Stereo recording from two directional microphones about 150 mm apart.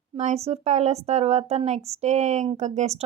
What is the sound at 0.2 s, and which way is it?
A woman's voice, 45° right (ahead or behind).